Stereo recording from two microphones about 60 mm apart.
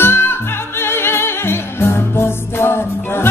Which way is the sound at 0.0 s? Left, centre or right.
Left.